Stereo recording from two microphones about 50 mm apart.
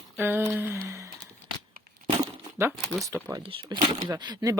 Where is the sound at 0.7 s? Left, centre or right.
Right.